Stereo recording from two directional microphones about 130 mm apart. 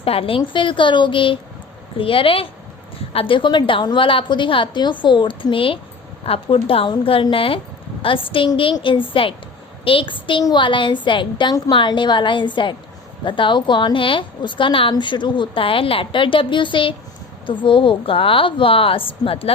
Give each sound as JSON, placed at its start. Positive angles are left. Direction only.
{"t": 0.0, "sound": "a woman's voice", "side_deg": 45}